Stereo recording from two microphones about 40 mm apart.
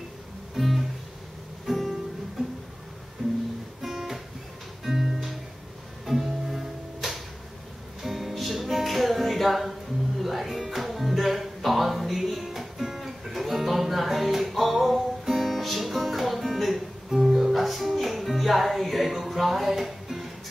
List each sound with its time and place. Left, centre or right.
0.6 s music: centre
2.4 s music: centre
3.8 s guitar: centre
4.8 s music: centre